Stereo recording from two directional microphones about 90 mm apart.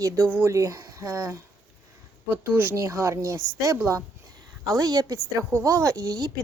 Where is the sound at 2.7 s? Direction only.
35° right (ahead or behind).